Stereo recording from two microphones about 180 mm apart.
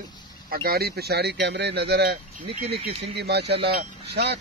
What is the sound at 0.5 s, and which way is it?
Speech, 55° right (ahead or behind).